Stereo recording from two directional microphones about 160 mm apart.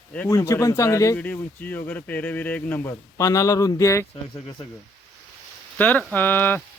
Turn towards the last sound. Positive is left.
turn(degrees=10)  # may be behind; listen again after turning